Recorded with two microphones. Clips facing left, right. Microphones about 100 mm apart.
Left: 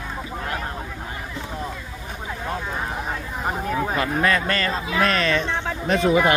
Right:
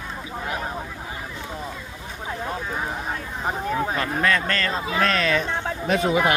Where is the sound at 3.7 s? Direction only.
5° left (ahead or behind).